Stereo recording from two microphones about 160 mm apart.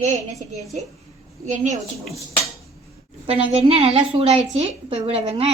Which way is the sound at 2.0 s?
Centre (ahead or behind).